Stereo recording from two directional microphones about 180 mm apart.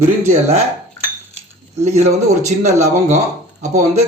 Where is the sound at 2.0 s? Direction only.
40° right (ahead or behind).